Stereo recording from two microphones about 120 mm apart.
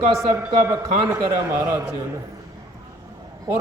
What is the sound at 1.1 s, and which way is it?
Mantra, 25° right (ahead or behind).